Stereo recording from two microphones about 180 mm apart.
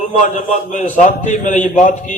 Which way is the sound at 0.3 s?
45° left (ahead or behind).